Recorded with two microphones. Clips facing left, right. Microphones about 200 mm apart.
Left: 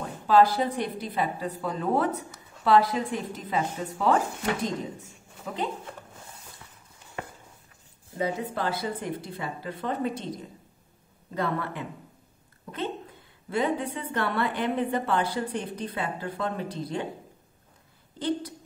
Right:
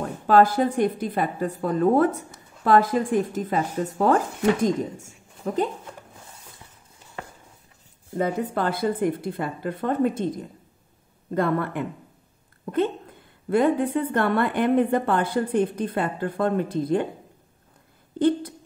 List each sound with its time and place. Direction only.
0.3 s a woman's voice: 50° right (ahead or behind)
8.2 s a woman's voice: 50° right (ahead or behind)